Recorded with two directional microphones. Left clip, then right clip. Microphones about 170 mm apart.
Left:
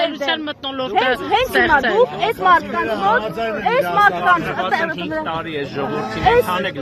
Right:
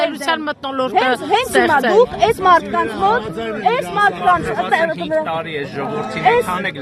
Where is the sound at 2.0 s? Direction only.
65° right (ahead or behind).